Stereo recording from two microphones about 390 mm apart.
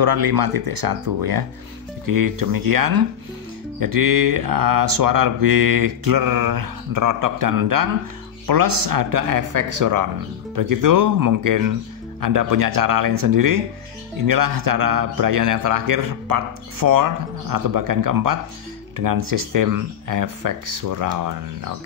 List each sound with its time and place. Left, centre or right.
0.0 s a man's voice: right